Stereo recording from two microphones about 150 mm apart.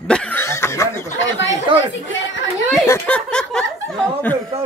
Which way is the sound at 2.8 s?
20° left (ahead or behind).